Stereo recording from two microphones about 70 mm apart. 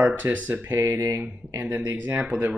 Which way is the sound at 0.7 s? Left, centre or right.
Right.